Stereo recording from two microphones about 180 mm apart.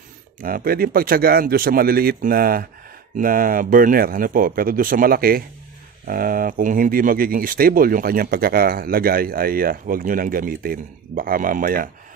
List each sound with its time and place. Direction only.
0.4 s speech: 55° right (ahead or behind)